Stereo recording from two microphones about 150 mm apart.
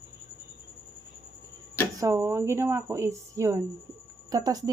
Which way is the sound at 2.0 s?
15° right (ahead or behind).